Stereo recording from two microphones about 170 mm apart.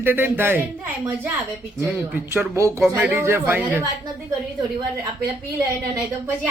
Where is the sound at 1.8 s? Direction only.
10° right (ahead or behind).